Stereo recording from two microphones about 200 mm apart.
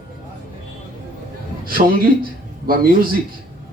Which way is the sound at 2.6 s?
45° right (ahead or behind).